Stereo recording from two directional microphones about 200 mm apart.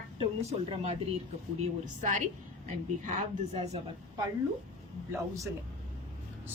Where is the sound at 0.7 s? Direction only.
30° right (ahead or behind).